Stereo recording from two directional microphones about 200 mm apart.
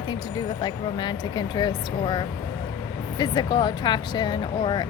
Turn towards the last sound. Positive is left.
turn(degrees=20)  # may be behind; listen again after turning